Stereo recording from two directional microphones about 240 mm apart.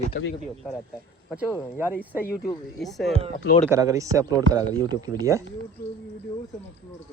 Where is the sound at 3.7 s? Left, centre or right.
Centre.